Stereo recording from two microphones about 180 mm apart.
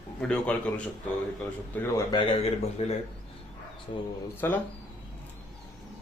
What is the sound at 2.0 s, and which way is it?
Speech, 30° left (ahead or behind).